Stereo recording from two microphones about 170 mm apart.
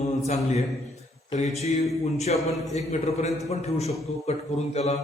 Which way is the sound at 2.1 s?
40° left (ahead or behind).